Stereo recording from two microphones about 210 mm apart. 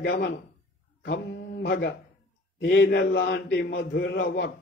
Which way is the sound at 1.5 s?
50° left (ahead or behind).